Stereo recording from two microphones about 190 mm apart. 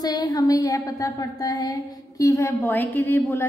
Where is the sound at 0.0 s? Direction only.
20° left (ahead or behind).